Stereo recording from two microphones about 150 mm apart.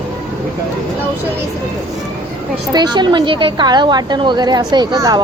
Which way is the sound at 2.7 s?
25° right (ahead or behind).